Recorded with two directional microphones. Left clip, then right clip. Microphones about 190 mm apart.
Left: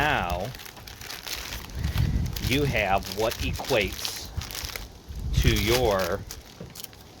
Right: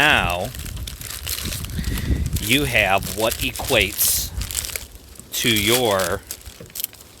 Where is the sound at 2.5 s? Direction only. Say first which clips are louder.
Right 7 dB; 75° right (ahead or behind).